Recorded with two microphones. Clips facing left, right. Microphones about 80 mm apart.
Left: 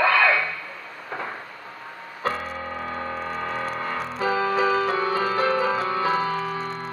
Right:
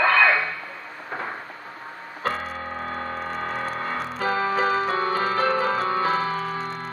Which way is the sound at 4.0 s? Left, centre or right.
Centre.